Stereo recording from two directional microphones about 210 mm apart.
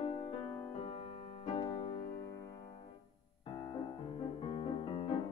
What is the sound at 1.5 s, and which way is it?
Music, 30° left (ahead or behind).